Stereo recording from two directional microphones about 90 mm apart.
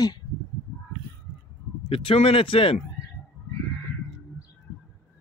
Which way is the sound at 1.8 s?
90° left.